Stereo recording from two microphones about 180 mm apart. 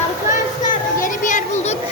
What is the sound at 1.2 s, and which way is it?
Children playing, 45° left (ahead or behind).